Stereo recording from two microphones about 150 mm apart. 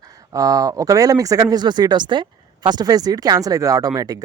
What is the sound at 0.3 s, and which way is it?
Speech, 25° right (ahead or behind).